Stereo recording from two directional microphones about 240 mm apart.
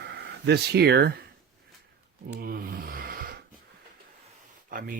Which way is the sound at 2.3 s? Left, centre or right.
Right.